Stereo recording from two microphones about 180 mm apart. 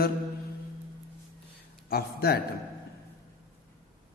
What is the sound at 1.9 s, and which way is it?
Speech, 60° left (ahead or behind).